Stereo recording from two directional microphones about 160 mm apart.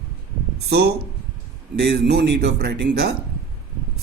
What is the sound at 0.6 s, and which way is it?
Speech, 90° right.